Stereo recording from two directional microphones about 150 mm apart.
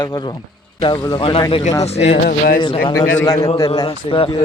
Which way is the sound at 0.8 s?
30° left (ahead or behind).